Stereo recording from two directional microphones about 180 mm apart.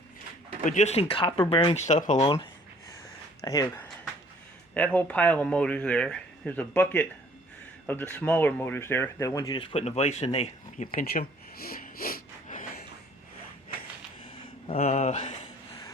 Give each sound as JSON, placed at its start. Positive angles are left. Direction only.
{"t": 0.6, "sound": "speech", "side_deg": 45}
{"t": 2.2, "sound": "speech", "side_deg": 25}
{"t": 4.7, "sound": "speech", "side_deg": 10}
{"t": 10.9, "sound": "a sound", "side_deg": 55}
{"t": 14.7, "sound": "speech", "side_deg": 40}